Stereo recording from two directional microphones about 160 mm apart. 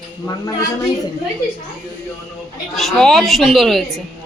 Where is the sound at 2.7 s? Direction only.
5° left (ahead or behind).